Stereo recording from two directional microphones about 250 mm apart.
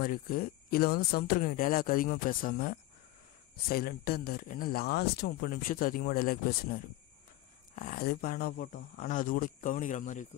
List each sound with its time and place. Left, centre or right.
0.0 s speech: left